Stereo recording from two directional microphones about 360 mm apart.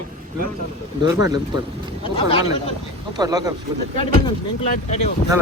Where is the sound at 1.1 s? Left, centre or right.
Centre.